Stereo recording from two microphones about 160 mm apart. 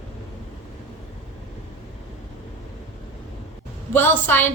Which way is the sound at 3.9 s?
15° left (ahead or behind).